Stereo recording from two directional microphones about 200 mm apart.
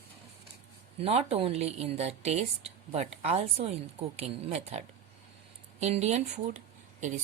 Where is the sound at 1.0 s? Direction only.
30° right (ahead or behind).